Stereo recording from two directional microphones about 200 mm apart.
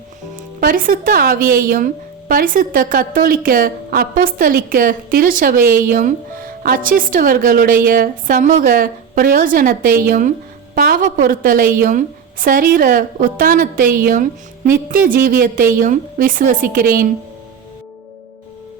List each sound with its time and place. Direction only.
0.3 s speech: 45° right (ahead or behind)